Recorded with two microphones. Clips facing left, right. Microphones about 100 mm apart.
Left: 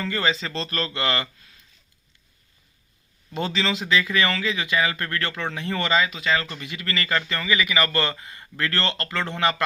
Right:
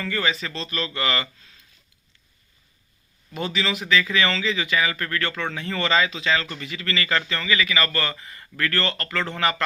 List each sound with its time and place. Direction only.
0.0 s speech: 25° left (ahead or behind)
0.9 s a man's voice: 20° left (ahead or behind)
3.3 s a man's voice: 30° left (ahead or behind); by 6.5 s 10° left (ahead or behind)
6.5 s a man's voice: 20° left (ahead or behind)